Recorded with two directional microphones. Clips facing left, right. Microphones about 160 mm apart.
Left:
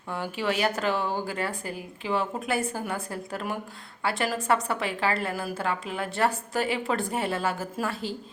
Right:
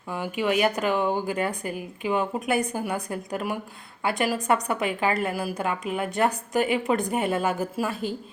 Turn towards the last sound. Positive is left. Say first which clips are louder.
# right 3 dB
turn(degrees=-15)  # may be behind; listen again after turning